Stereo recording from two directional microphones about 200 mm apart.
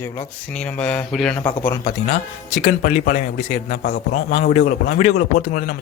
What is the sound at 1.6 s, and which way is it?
A man's voice, 45° left (ahead or behind).